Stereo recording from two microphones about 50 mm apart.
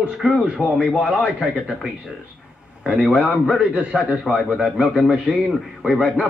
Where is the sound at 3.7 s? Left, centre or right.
Right.